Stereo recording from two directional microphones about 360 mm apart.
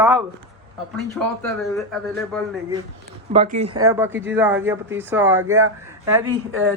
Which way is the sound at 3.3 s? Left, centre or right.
Centre.